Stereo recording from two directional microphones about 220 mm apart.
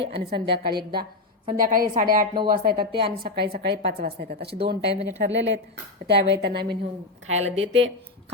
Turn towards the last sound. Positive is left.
turn(degrees=-60)  # may be behind; listen again after turning